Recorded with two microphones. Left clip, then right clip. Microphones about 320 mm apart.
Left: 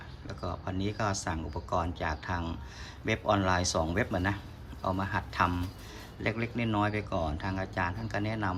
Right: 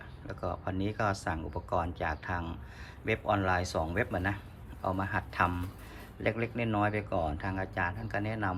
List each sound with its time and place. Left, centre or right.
0.3 s speech: centre